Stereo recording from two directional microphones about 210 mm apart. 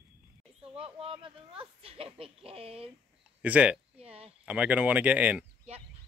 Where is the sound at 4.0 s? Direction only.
30° right (ahead or behind).